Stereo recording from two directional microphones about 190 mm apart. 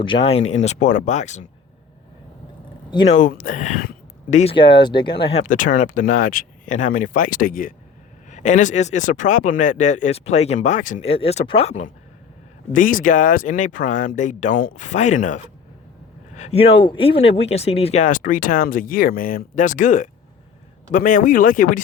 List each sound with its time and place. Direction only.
0.0 s speech: 30° left (ahead or behind)
3.1 s speech: 45° left (ahead or behind)
4.5 s speech: 25° left (ahead or behind); by 21.8 s 45° left (ahead or behind)